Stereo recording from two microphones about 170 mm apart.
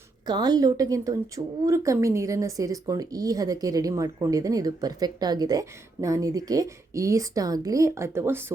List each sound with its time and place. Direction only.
0.3 s speech: 25° right (ahead or behind)